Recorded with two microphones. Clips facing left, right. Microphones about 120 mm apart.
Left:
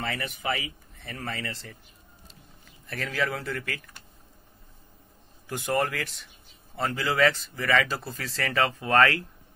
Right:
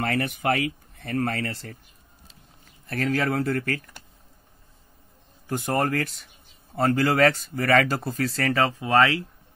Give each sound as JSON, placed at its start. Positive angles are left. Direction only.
{"t": 0.0, "sound": "speech", "side_deg": -50}
{"t": 2.9, "sound": "speech", "side_deg": -45}
{"t": 5.5, "sound": "speech", "side_deg": -40}
{"t": 8.7, "sound": "speech", "side_deg": -15}